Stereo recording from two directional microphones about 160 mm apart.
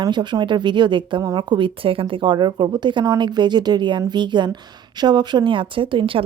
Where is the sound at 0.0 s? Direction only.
25° right (ahead or behind).